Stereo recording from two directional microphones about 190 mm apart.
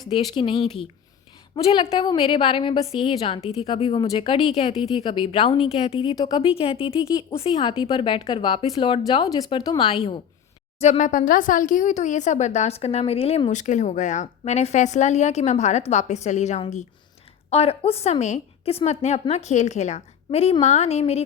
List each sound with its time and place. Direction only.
0.3 s speech: 25° left (ahead or behind)
6.1 s speech: 20° left (ahead or behind)